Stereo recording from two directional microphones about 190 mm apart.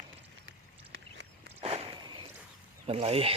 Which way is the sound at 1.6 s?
30° right (ahead or behind).